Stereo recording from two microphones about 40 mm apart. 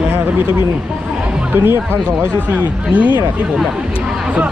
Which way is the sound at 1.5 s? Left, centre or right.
Right.